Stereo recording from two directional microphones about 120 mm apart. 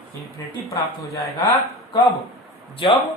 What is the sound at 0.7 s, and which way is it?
Speech, 25° left (ahead or behind).